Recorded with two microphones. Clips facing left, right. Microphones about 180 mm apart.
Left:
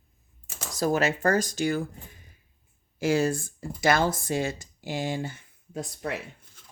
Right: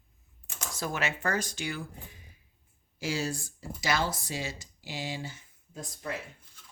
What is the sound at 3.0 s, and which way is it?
Speech, 55° left (ahead or behind).